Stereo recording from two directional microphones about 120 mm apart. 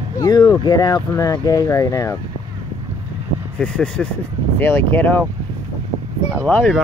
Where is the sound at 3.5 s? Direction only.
10° left (ahead or behind).